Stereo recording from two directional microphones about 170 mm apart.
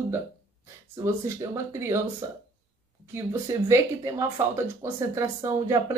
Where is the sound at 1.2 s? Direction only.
15° right (ahead or behind).